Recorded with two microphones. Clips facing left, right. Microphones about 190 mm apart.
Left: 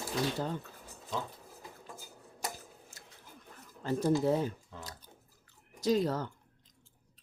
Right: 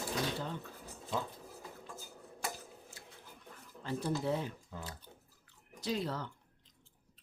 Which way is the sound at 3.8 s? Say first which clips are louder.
Left 7 dB; 45° left (ahead or behind).